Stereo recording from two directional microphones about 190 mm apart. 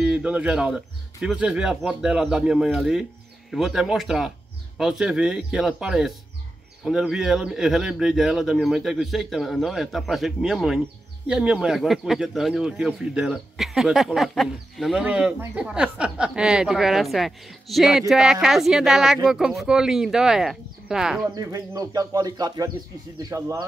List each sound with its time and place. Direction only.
0.0 s a man's voice: 5° right (ahead or behind)
21.4 s speech: 20° right (ahead or behind)